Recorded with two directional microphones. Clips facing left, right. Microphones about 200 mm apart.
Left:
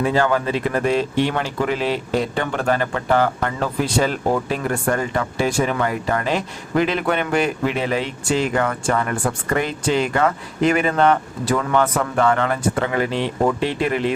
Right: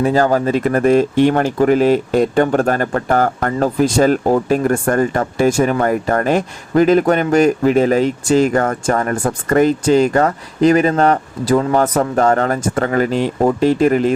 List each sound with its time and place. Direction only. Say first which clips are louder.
0.0 s speech: right 5 dB; 40° right (ahead or behind)